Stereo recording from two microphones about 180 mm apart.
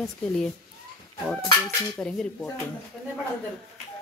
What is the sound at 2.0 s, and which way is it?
Speech, 5° left (ahead or behind).